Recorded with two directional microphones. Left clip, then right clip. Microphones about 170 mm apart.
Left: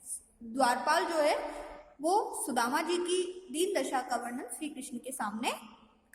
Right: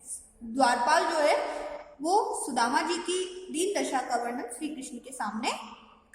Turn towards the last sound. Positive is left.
turn(degrees=45)  # may be behind; listen again after turning